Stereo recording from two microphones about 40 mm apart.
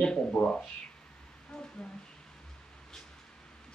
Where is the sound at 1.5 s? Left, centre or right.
Centre.